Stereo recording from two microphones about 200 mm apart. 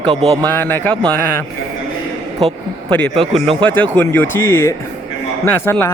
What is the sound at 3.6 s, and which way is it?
Speech, 10° left (ahead or behind).